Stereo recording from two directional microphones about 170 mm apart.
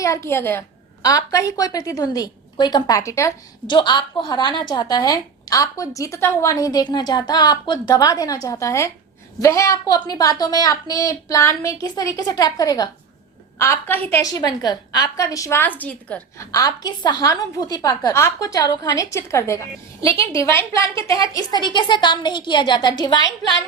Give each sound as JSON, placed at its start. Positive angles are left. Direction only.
{"t": 0.0, "sound": "a woman's voice", "side_deg": 15}
{"t": 14.2, "sound": "a woman's voice", "side_deg": 20}